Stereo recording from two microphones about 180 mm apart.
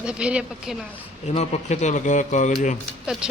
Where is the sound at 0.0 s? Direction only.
5° right (ahead or behind).